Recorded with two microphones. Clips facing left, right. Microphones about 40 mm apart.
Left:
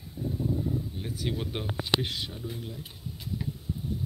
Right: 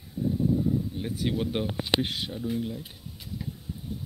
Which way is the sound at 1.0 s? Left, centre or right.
Centre.